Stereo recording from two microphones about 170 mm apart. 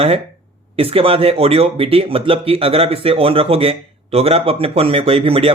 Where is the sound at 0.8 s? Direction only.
35° right (ahead or behind).